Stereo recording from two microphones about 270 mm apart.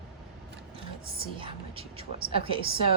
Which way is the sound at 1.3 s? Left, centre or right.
Centre.